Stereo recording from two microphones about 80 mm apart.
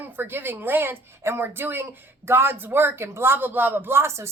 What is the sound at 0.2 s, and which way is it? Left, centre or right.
Speech, right.